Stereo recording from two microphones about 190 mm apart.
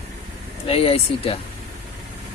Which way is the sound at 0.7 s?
30° left (ahead or behind).